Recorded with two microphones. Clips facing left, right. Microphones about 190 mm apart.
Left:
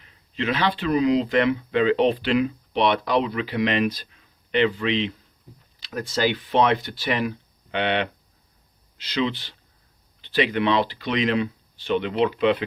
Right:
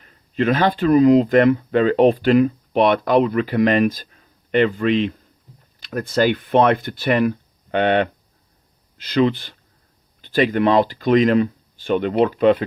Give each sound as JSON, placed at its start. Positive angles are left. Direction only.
{"t": 0.0, "sound": "speech", "side_deg": -45}